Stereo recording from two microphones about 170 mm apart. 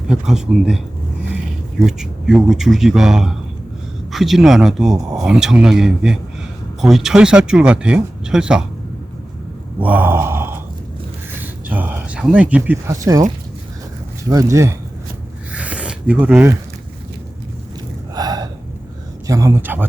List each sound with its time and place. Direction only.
0.1 s speech: 5° right (ahead or behind)
1.9 s speech: 5° right (ahead or behind)
9.8 s a sound: 10° right (ahead or behind)
14.3 s speech: 20° right (ahead or behind)
15.5 s a sound: 5° right (ahead or behind)
18.1 s gasp: 25° right (ahead or behind)
19.3 s speech: 20° right (ahead or behind)